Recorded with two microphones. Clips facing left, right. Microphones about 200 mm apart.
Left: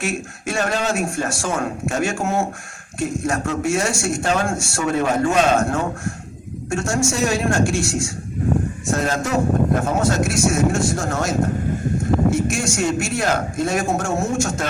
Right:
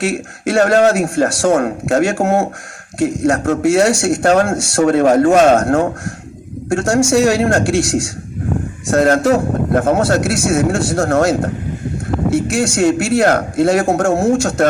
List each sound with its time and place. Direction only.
0.0 s a man's voice: 70° right (ahead or behind)